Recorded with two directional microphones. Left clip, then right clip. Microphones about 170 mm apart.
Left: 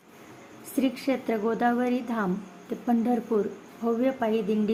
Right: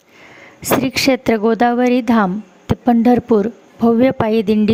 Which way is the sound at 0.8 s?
65° right (ahead or behind).